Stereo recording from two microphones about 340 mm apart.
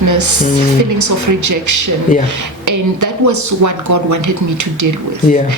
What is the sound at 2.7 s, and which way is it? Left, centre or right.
Speech, right.